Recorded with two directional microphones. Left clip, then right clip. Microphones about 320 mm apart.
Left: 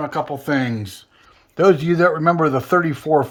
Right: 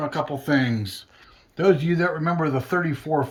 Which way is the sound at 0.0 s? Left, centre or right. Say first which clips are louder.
Left 3 dB; centre.